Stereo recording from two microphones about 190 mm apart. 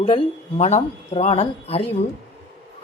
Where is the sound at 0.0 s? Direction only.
30° left (ahead or behind).